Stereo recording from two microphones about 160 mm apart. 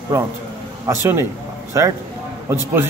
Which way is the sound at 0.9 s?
15° right (ahead or behind).